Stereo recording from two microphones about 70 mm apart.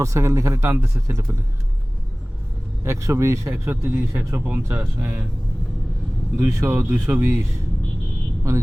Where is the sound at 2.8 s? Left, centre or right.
Right.